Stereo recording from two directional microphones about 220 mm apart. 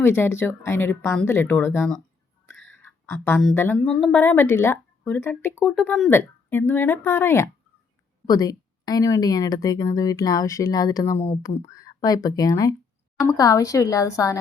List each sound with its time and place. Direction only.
0.0 s speech: 10° left (ahead or behind)